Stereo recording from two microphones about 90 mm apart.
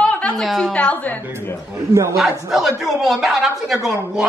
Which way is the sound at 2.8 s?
5° right (ahead or behind).